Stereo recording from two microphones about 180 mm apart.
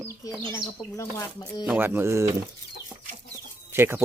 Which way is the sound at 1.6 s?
10° right (ahead or behind).